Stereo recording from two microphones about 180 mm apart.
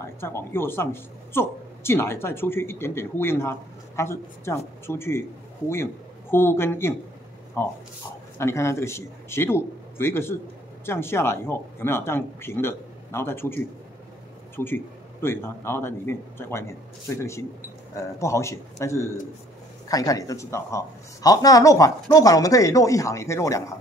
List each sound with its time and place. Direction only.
0.0 s speech: 15° left (ahead or behind)
6.3 s speech: 15° left (ahead or behind)
8.4 s speech: 15° left (ahead or behind)
14.6 s speech: 15° left (ahead or behind)